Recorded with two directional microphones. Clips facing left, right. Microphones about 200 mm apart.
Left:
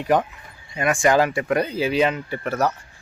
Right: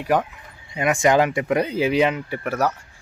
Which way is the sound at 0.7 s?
20° right (ahead or behind).